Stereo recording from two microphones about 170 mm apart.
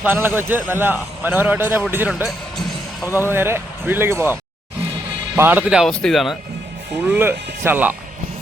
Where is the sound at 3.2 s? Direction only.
15° right (ahead or behind).